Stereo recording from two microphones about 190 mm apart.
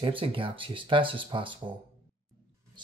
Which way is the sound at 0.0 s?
25° right (ahead or behind).